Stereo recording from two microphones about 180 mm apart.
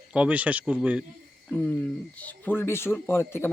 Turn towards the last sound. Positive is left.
turn(degrees=15)  # may be behind; listen again after turning